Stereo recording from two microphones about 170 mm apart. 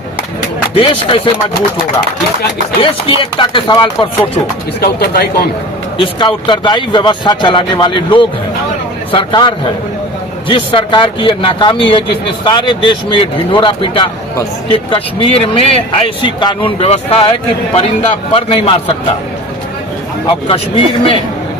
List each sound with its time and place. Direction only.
0.7 s speech: 30° left (ahead or behind)
3.2 s speech: 30° left (ahead or behind)
4.8 s speech: 70° left (ahead or behind)
6.0 s speech: 30° left (ahead or behind)
20.2 s speech: 30° left (ahead or behind)